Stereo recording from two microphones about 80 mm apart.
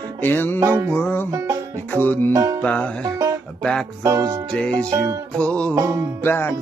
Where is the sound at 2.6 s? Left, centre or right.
Centre.